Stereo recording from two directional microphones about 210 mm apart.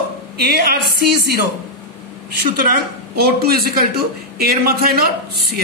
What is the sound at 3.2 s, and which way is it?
A man's voice, 45° right (ahead or behind).